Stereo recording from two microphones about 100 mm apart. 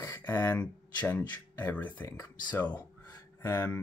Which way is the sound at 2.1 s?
30° left (ahead or behind).